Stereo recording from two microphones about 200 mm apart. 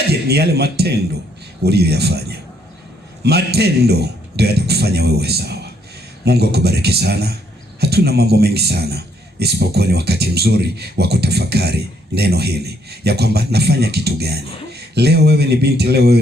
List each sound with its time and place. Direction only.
0.1 s a man's voice: 55° right (ahead or behind)